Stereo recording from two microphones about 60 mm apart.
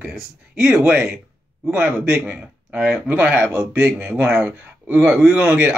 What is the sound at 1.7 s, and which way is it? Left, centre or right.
Speech, right.